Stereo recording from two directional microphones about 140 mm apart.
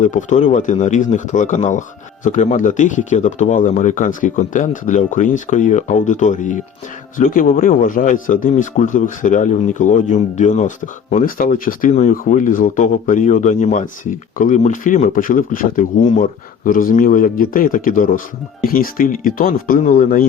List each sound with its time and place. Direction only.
0.0 s speech: 65° left (ahead or behind)
7.2 s speech: 85° left; by 10.7 s 60° left (ahead or behind)
11.1 s speech: 70° left (ahead or behind)
18.6 s speech: 90° left